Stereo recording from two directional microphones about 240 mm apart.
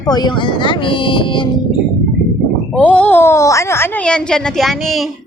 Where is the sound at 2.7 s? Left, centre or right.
Centre.